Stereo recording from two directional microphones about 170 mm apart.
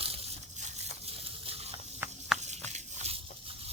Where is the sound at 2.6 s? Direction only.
40° right (ahead or behind).